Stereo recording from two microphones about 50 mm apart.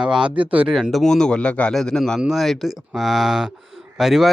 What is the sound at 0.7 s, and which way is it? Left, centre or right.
Speech, centre.